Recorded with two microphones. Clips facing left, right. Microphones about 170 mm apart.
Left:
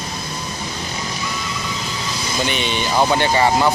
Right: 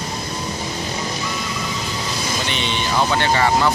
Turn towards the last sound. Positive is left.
turn(degrees=15)  # may be behind; listen again after turning